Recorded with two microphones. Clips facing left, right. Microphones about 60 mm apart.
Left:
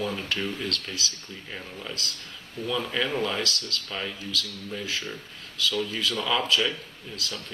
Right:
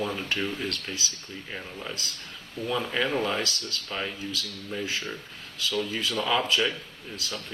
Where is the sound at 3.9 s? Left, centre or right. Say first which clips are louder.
Right 2 dB; centre.